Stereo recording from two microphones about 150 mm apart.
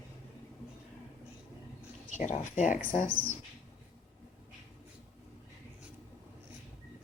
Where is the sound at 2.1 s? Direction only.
50° left (ahead or behind).